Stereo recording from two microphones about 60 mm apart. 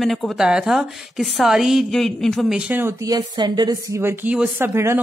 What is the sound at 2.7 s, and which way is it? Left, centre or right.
Speech, right.